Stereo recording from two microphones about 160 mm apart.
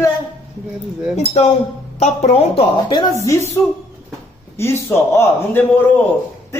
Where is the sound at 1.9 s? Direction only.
45° left (ahead or behind); by 3.1 s 30° left (ahead or behind).